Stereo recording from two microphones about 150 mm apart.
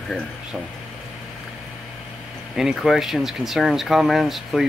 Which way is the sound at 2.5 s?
Centre (ahead or behind).